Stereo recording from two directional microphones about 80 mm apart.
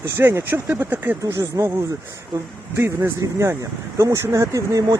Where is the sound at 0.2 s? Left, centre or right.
Right.